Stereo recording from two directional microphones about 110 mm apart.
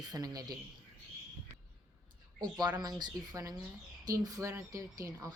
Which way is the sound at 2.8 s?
40° right (ahead or behind).